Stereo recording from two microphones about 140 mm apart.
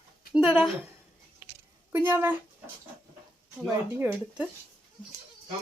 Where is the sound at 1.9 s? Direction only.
15° right (ahead or behind).